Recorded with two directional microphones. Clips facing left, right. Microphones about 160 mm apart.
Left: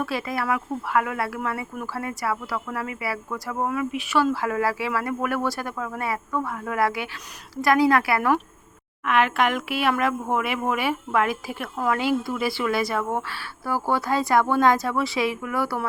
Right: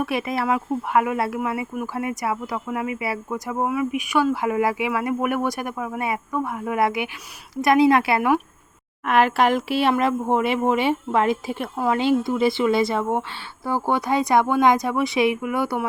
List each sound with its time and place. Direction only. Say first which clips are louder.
0.0 s speech: right 3 dB; 20° right (ahead or behind)
9.0 s speech: right 3 dB; 35° right (ahead or behind); by 15.9 s 20° right (ahead or behind)